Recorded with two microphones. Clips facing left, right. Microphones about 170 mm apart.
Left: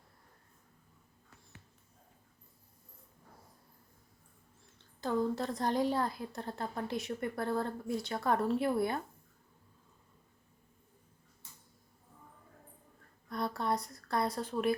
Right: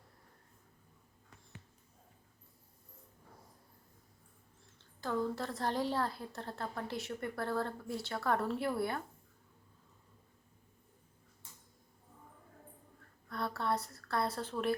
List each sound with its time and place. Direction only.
4.9 s a woman's voice: 20° left (ahead or behind)
13.3 s a woman's voice: 15° left (ahead or behind)